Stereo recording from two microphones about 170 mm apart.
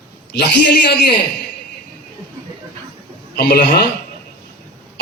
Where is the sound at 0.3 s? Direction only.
70° left (ahead or behind).